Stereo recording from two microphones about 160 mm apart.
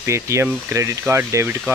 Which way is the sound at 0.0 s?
15° right (ahead or behind).